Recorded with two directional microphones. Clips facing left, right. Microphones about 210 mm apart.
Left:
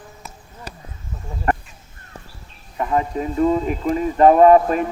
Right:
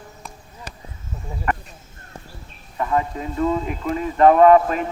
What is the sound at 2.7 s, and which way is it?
Speech, 25° left (ahead or behind).